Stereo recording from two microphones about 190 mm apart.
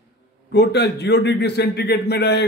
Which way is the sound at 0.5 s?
60° left (ahead or behind).